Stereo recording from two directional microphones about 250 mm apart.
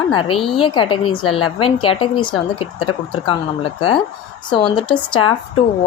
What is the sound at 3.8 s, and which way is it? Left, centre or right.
Speech, left.